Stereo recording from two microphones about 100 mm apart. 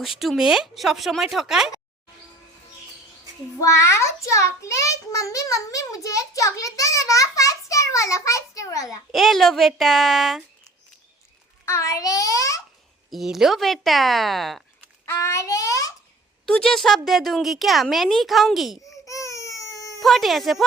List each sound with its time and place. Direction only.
0.0 s speech: centre (ahead or behind)
3.6 s a child's voice: 30° left (ahead or behind)
9.1 s speech: centre (ahead or behind)
11.6 s a child's voice: 30° left (ahead or behind)
13.1 s speech: centre (ahead or behind)
15.0 s a child's voice: 30° left (ahead or behind)
16.5 s speech: 5° left (ahead or behind)
19.0 s baby cry: 35° left (ahead or behind)
20.0 s speech: centre (ahead or behind)